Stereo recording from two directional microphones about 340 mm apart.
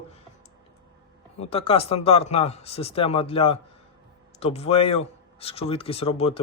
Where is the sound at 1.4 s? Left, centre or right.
Centre.